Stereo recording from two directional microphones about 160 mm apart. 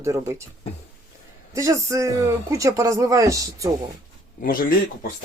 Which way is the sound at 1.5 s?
20° right (ahead or behind).